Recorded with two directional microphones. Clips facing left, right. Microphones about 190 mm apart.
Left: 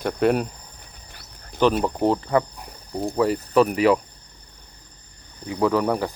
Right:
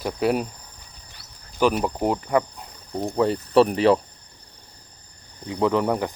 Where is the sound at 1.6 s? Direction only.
10° right (ahead or behind).